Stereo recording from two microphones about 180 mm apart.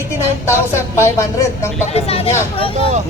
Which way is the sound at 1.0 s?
15° left (ahead or behind).